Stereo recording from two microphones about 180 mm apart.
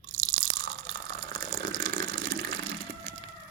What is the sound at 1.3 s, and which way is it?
Water, 45° right (ahead or behind).